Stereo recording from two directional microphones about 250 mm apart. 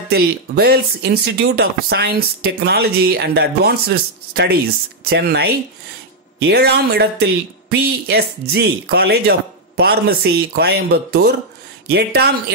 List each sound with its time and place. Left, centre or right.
0.1 s speech: right